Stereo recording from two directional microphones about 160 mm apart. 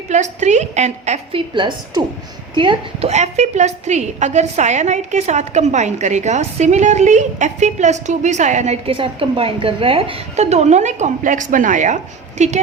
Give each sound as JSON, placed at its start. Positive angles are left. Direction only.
{"t": 0.1, "sound": "a woman's voice", "side_deg": -45}
{"t": 1.5, "sound": "a woman's voice", "side_deg": -30}
{"t": 3.1, "sound": "a woman's voice", "side_deg": -45}